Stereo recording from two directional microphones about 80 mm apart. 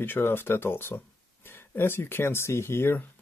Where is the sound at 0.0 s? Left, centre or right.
Left.